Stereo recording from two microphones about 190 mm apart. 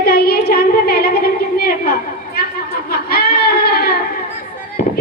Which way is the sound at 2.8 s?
55° left (ahead or behind).